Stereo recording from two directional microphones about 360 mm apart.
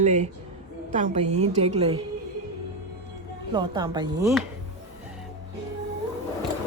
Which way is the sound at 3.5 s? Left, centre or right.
Centre.